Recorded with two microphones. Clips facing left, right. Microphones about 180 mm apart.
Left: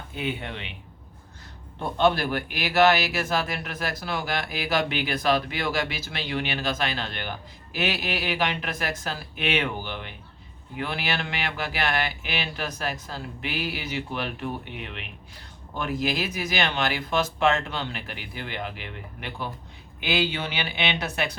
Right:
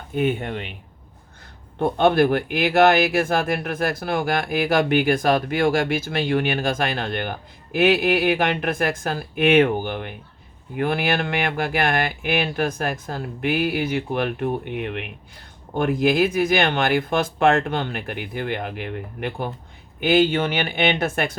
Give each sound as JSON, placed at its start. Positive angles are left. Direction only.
{"t": 0.1, "sound": "speech", "side_deg": -50}
{"t": 1.8, "sound": "speech", "side_deg": -55}